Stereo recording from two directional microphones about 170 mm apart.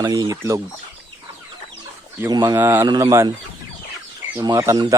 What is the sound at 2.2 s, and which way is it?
Speech, 25° right (ahead or behind).